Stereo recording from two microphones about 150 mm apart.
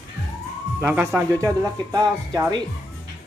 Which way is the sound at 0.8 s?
15° right (ahead or behind).